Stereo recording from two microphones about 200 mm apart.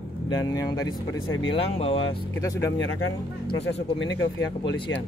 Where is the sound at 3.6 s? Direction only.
65° left (ahead or behind).